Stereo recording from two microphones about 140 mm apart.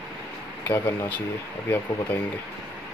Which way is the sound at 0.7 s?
15° left (ahead or behind).